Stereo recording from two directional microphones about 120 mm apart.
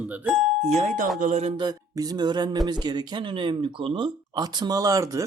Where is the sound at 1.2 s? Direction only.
85° right.